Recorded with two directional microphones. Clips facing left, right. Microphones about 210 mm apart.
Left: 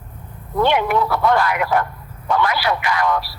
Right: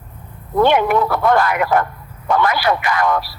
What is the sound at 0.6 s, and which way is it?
Speech, 50° right (ahead or behind).